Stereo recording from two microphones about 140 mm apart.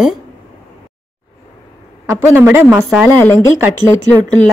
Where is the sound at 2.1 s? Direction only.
20° right (ahead or behind).